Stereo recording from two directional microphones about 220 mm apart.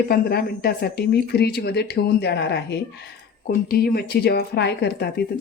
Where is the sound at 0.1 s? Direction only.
45° left (ahead or behind).